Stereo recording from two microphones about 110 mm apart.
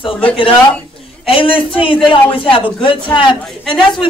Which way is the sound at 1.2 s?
55° left (ahead or behind).